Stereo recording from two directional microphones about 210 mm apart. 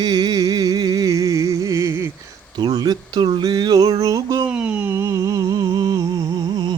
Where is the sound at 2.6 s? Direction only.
20° right (ahead or behind).